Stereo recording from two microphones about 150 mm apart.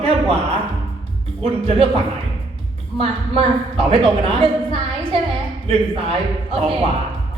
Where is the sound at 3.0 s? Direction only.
40° right (ahead or behind).